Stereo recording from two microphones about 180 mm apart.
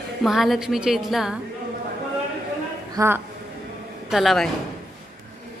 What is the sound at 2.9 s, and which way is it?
Speech, 10° right (ahead or behind).